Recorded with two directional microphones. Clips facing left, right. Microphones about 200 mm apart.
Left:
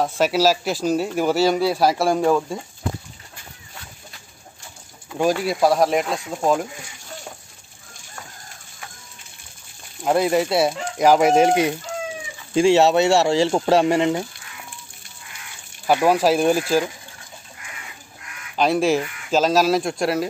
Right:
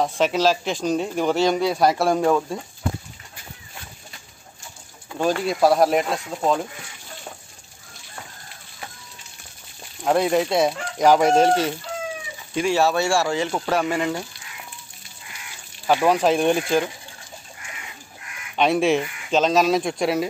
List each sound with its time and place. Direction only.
0.0 s speech: 5° left (ahead or behind)
5.2 s speech: 10° left (ahead or behind)
6.4 s chicken: 10° left (ahead or behind)
10.0 s speech: centre (ahead or behind)
11.0 s chicken: 10° left (ahead or behind)
12.5 s speech: 25° left (ahead or behind)
15.9 s speech: 10° left (ahead or behind)
18.6 s speech: centre (ahead or behind)